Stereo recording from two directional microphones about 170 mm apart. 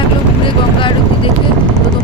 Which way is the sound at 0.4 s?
30° left (ahead or behind).